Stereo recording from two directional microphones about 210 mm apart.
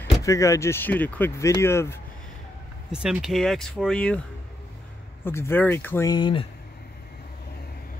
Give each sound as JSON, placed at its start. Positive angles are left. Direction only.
{"t": 0.2, "sound": "speech", "side_deg": 15}
{"t": 2.9, "sound": "speech", "side_deg": -5}
{"t": 5.2, "sound": "speech", "side_deg": 10}